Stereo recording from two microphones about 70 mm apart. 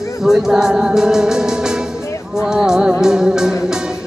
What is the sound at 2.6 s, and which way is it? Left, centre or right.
Music, centre.